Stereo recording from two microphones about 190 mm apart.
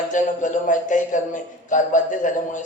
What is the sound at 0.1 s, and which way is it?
A man's voice, 40° left (ahead or behind).